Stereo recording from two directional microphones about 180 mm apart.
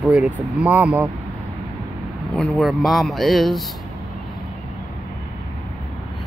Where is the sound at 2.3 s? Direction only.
5° left (ahead or behind).